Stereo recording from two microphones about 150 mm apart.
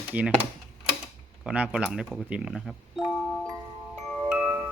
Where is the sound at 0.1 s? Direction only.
10° right (ahead or behind).